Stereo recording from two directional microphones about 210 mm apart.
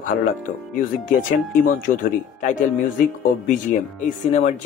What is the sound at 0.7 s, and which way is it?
Speech, 40° left (ahead or behind).